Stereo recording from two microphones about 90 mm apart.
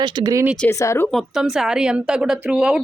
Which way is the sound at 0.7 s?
35° left (ahead or behind).